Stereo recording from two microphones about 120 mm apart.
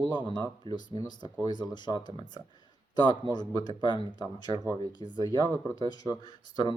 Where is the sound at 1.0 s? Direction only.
35° left (ahead or behind).